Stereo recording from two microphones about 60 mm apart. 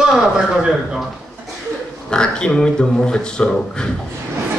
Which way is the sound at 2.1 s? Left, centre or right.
Centre.